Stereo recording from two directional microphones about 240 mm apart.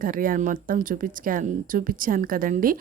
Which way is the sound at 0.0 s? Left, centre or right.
Right.